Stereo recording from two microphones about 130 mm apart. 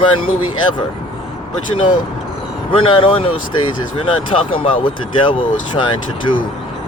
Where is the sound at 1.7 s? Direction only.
40° left (ahead or behind).